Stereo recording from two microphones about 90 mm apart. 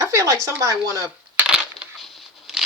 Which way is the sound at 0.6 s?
40° right (ahead or behind).